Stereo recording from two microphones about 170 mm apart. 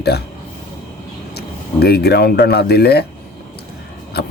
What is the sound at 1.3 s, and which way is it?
Speech, 70° left (ahead or behind).